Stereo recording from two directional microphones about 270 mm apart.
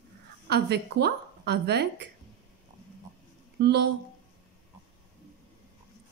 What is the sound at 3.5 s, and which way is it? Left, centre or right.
Speech, right.